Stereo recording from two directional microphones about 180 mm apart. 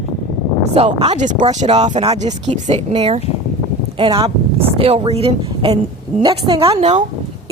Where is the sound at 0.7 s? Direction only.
35° right (ahead or behind).